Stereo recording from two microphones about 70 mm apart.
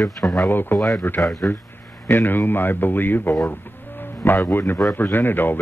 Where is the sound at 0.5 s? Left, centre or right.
Left.